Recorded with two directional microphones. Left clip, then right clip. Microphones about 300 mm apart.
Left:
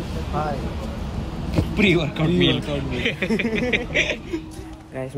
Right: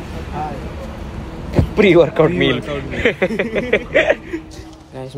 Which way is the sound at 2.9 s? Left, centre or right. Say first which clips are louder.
Right 8 dB; centre.